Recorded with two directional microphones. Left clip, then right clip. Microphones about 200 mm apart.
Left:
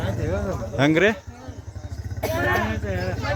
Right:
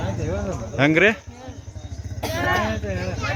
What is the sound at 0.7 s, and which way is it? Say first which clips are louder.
Speech: right 2 dB; centre (ahead or behind).